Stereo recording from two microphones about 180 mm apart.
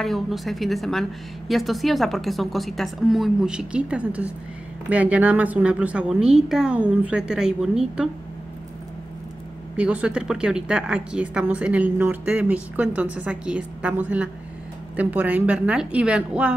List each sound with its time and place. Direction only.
0.0 s a woman's voice: centre (ahead or behind)
9.8 s a woman's voice: 5° right (ahead or behind)